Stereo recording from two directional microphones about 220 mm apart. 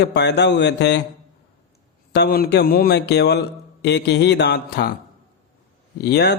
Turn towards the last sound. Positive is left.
turn(degrees=50)  # may be behind; listen again after turning